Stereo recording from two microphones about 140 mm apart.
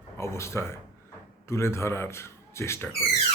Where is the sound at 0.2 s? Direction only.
20° left (ahead or behind).